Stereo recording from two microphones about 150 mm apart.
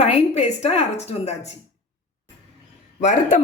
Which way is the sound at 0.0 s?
45° left (ahead or behind).